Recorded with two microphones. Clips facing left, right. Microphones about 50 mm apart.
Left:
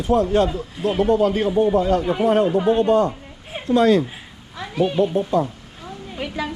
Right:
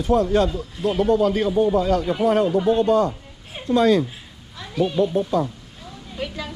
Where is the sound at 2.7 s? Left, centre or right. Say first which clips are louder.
Left 1 dB; left.